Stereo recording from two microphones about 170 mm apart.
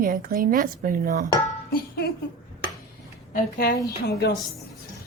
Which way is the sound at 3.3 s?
55° left (ahead or behind).